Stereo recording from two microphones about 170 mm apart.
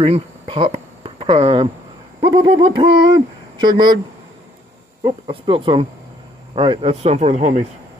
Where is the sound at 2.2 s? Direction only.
30° right (ahead or behind).